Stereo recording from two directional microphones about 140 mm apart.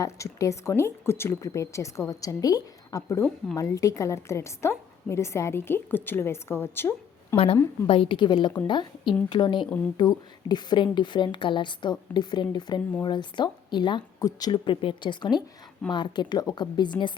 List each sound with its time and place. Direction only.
0.0 s a woman's voice: 20° left (ahead or behind)
7.3 s a woman's voice: 40° left (ahead or behind)